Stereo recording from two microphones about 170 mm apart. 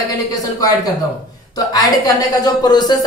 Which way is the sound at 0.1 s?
20° left (ahead or behind).